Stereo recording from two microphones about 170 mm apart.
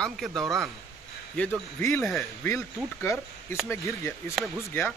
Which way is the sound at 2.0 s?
Centre (ahead or behind).